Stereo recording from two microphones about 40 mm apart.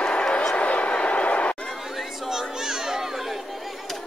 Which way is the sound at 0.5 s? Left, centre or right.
Left.